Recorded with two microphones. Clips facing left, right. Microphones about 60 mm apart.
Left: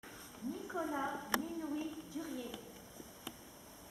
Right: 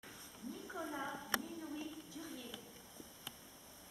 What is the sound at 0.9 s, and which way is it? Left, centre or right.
A woman's voice, centre.